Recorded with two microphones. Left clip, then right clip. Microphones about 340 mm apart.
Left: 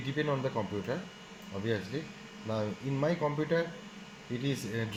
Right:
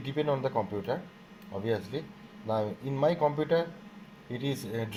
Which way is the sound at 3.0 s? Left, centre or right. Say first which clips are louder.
Right 5 dB; right.